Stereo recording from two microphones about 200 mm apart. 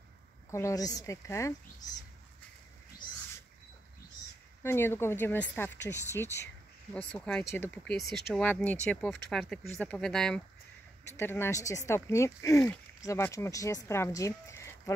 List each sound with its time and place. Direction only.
0.5 s speech: 15° left (ahead or behind)
4.6 s speech: 10° left (ahead or behind)